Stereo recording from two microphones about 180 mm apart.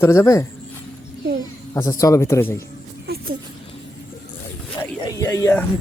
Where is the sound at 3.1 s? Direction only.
65° right (ahead or behind).